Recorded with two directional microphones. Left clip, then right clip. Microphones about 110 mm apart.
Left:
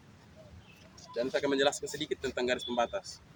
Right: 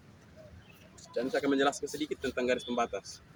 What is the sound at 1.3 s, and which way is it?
Speech, 45° left (ahead or behind).